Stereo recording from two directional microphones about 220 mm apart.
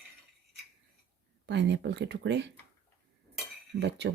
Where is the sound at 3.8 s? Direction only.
50° right (ahead or behind).